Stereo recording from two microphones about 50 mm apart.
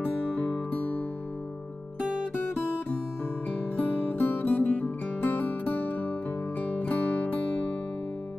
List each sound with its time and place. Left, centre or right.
0.0 s music: left
3.7 s music: left